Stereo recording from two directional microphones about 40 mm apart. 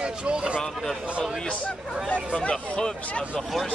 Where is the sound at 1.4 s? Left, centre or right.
Left.